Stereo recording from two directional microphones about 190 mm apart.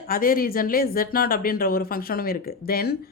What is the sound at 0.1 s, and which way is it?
Speech, 50° left (ahead or behind).